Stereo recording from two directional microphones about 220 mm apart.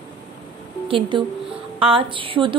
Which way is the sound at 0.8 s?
25° right (ahead or behind).